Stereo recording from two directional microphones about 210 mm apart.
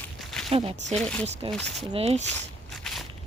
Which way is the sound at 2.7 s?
Centre (ahead or behind).